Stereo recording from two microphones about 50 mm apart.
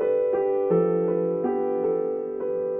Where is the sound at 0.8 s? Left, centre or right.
Centre.